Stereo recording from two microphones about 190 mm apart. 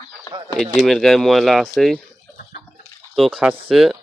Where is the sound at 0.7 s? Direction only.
Centre (ahead or behind).